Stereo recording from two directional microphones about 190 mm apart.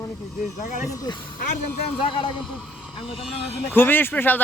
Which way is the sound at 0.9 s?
20° left (ahead or behind).